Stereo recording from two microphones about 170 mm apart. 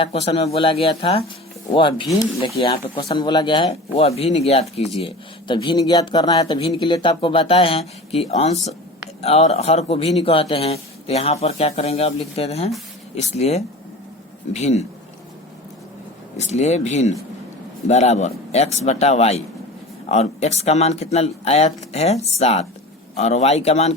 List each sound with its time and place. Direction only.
0.0 s speech: 35° left (ahead or behind)
5.0 s speech: 25° left (ahead or behind)
16.4 s speech: 40° left (ahead or behind)